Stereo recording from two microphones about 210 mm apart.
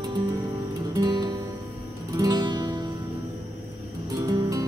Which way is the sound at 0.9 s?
20° right (ahead or behind).